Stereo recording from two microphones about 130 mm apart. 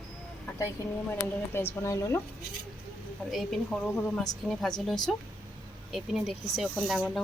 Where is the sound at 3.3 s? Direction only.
Centre (ahead or behind).